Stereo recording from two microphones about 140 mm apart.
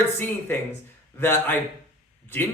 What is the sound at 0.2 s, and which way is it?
Speech, 15° left (ahead or behind).